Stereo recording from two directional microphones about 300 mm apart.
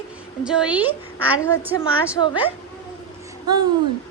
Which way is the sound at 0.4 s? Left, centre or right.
Centre.